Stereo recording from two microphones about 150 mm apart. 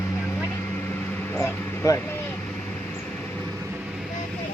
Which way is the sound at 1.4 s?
20° left (ahead or behind).